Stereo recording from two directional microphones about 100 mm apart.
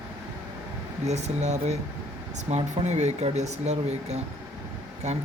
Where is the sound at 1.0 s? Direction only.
90° right.